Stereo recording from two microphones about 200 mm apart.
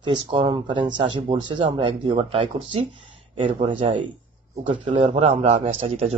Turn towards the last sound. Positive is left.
turn(degrees=-30)  # may be behind; listen again after turning